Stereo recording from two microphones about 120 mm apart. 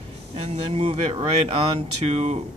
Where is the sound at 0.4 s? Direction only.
50° right (ahead or behind).